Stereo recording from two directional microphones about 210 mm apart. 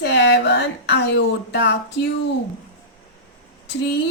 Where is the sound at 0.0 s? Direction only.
55° left (ahead or behind).